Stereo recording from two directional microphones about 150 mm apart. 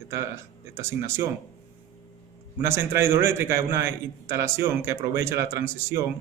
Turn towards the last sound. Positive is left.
turn(degrees=-20)  # may be behind; listen again after turning